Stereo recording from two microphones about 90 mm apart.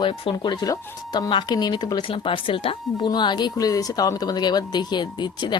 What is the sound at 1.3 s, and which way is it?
Speech, 55° left (ahead or behind).